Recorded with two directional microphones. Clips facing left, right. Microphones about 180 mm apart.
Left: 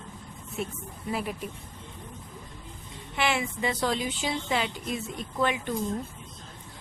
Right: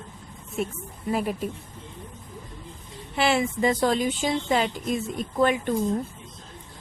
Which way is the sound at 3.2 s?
40° right (ahead or behind).